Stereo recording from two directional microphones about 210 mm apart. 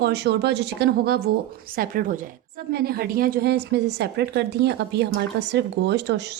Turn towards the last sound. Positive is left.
turn(degrees=-55)  # may be behind; listen again after turning